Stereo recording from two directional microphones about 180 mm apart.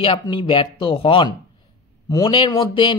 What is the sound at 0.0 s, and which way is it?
Speech, 30° left (ahead or behind).